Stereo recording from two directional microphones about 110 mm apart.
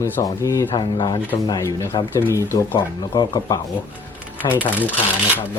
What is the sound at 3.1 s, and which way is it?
Speech, 35° left (ahead or behind).